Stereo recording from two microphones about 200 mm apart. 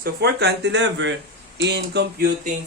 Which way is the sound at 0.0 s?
55° right (ahead or behind).